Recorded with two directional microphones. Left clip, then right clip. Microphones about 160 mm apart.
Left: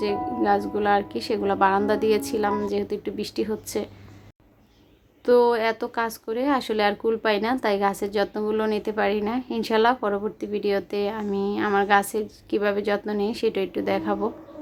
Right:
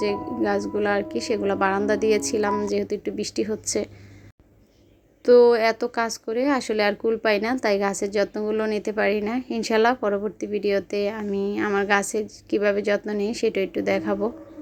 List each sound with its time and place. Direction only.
0.0 s speech: 10° right (ahead or behind)
5.2 s speech: 15° right (ahead or behind)